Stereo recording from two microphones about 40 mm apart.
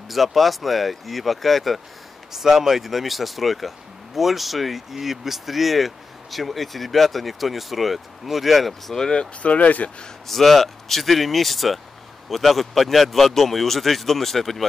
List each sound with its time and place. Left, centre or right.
0.1 s speech: centre
8.9 s speech: centre
9.2 s speech: left
10.2 s speech: centre